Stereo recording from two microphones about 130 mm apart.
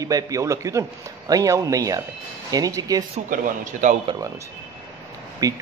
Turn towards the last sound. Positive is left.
turn(degrees=-25)  # may be behind; listen again after turning